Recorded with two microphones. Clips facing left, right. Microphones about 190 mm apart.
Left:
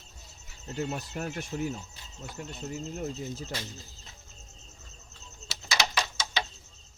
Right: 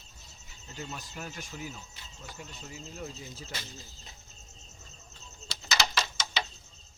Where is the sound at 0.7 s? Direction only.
60° left (ahead or behind).